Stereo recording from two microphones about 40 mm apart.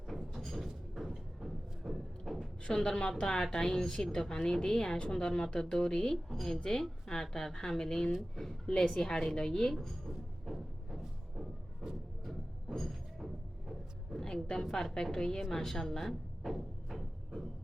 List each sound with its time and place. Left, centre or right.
0.1 s a sound: centre
2.6 s a woman's voice: left
4.8 s a woman's voice: left
10.4 s music: centre
11.8 s music: centre
12.2 s music: centre
14.2 s a sound: centre
14.6 s a woman's voice: centre
16.0 s a sound: centre